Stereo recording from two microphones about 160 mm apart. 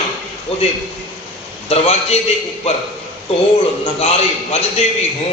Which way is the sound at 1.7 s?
40° left (ahead or behind).